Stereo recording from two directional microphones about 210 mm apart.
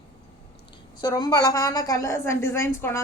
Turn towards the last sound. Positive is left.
turn(degrees=10)  # may be behind; listen again after turning